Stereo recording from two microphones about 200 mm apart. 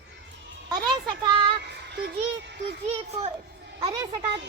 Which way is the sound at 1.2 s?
20° right (ahead or behind).